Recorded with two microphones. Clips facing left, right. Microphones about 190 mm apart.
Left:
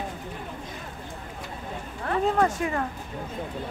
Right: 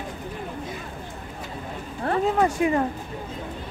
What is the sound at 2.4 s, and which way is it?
Speech, 15° right (ahead or behind).